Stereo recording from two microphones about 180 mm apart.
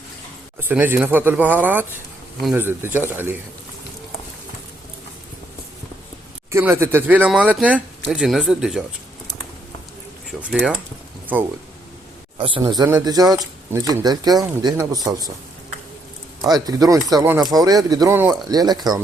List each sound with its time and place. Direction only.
0.6 s speech: 10° right (ahead or behind)
6.5 s speech: 15° right (ahead or behind)
10.4 s speech: 5° right (ahead or behind)
12.4 s speech: 30° right (ahead or behind)
16.4 s speech: 20° right (ahead or behind)